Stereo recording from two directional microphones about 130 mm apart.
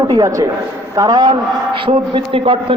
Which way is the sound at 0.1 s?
30° right (ahead or behind).